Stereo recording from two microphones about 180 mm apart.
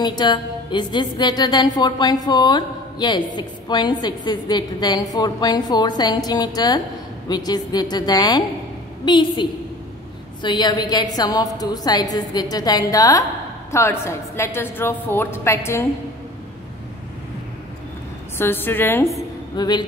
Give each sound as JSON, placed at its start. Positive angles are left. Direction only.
{"t": 0.0, "sound": "a woman's voice", "side_deg": 25}
{"t": 18.4, "sound": "a woman's voice", "side_deg": 10}
{"t": 19.5, "sound": "a woman's voice", "side_deg": 25}